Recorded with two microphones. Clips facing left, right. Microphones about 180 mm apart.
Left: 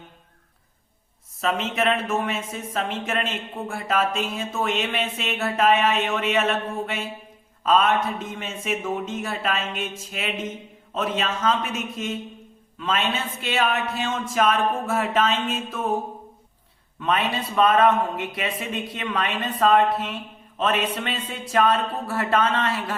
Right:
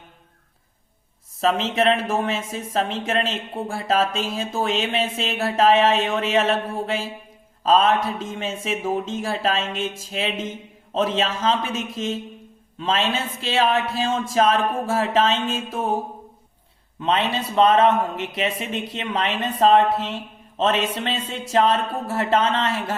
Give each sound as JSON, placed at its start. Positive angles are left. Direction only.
{"t": 1.4, "sound": "a man's voice", "side_deg": -30}
{"t": 12.8, "sound": "a woman's voice", "side_deg": -30}
{"t": 17.0, "sound": "a woman's voice", "side_deg": -25}